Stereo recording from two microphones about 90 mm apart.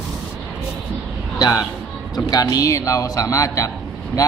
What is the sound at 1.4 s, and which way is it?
A man's voice, 45° left (ahead or behind).